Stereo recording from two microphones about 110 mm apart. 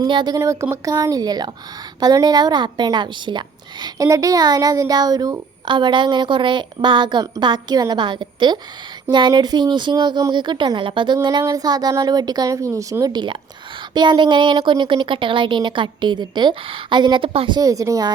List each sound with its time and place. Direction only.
0.0 s a woman's voice: 40° right (ahead or behind)
0.3 s a woman's voice: 25° right (ahead or behind); by 17.6 s 55° right (ahead or behind)
17.6 s a woman's voice: 30° right (ahead or behind)